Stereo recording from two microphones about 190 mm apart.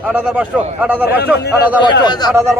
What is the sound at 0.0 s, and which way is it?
A man's voice, 5° right (ahead or behind).